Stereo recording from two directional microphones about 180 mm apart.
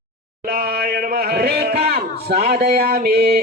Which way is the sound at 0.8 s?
60° right (ahead or behind).